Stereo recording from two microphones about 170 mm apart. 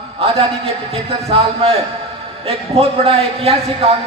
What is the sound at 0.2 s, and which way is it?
Speech, 35° right (ahead or behind).